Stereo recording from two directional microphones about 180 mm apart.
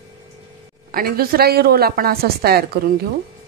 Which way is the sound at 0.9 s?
55° right (ahead or behind).